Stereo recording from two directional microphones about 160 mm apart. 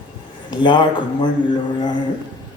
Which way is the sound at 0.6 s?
30° left (ahead or behind).